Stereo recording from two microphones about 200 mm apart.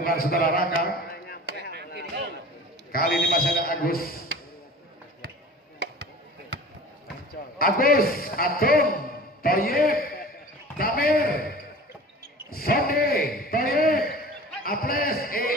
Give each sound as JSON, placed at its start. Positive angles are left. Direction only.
{"t": 0.0, "sound": "a man's voice", "side_deg": 50}
{"t": 1.6, "sound": "chop", "side_deg": -55}
{"t": 2.9, "sound": "a man's voice", "side_deg": 50}
{"t": 7.5, "sound": "a man's voice", "side_deg": 45}